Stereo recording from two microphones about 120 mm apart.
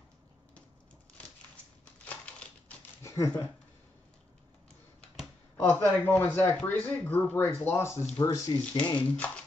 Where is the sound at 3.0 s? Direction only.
25° left (ahead or behind).